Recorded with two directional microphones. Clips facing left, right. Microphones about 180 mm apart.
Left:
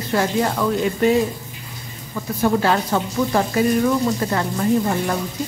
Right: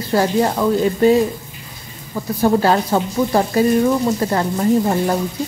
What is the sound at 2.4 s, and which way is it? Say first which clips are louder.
A woman's voice: right 3 dB; 35° right (ahead or behind).